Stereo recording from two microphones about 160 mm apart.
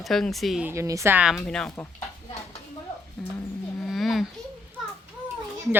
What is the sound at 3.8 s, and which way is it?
Dog, centre (ahead or behind).